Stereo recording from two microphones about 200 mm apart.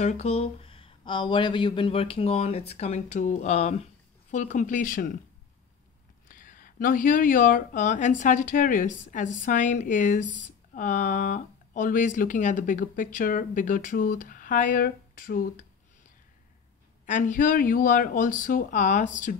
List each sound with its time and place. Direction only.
0.0 s speech: 35° left (ahead or behind)
6.2 s speech: 45° left (ahead or behind)
17.0 s speech: 40° left (ahead or behind)